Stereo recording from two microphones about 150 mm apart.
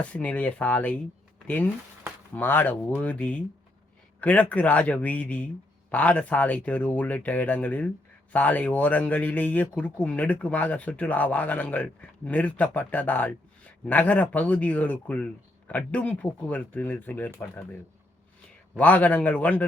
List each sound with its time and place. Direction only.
0.0 s a man's voice: 10° left (ahead or behind)
2.3 s a man's voice: 10° left (ahead or behind)
18.7 s a man's voice: 10° left (ahead or behind)